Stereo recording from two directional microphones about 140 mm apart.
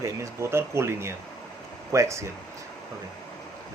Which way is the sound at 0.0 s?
20° right (ahead or behind).